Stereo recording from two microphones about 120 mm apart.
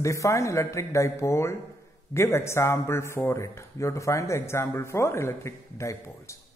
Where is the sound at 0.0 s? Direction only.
25° left (ahead or behind).